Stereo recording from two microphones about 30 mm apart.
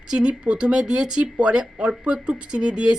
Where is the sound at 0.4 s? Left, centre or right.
Right.